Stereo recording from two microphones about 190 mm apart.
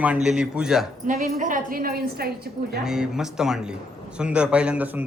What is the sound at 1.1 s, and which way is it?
A woman's voice, 40° right (ahead or behind).